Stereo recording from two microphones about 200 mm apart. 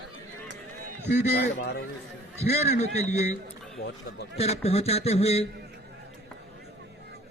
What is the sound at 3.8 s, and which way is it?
Speech, 50° left (ahead or behind).